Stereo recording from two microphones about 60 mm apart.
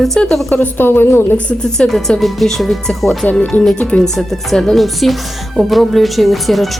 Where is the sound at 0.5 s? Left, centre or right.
Left.